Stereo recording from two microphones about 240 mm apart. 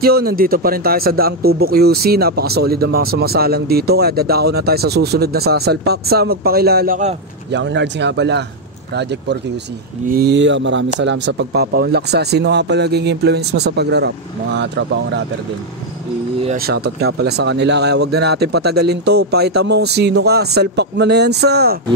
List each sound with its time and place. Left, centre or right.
0.0 s speech: right
16.4 s speech: right